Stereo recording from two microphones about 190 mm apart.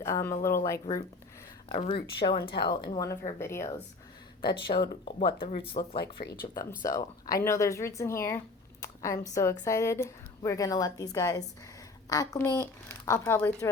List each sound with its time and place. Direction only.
0.0 s speech: 15° left (ahead or behind)
1.7 s speech: 30° left (ahead or behind); by 3.7 s 15° left (ahead or behind)
4.4 s speech: 25° left (ahead or behind)
6.5 s speech: 15° left (ahead or behind)